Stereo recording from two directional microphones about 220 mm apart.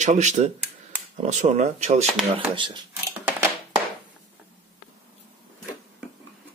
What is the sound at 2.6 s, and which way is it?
Speech, 20° right (ahead or behind).